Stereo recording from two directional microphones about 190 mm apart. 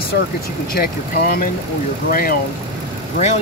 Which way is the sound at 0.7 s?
50° left (ahead or behind).